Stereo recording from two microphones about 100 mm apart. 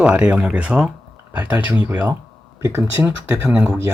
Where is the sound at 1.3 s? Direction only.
20° right (ahead or behind).